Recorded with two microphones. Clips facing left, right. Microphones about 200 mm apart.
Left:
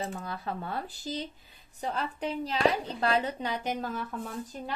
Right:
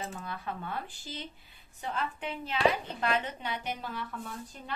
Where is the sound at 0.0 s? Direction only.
35° left (ahead or behind).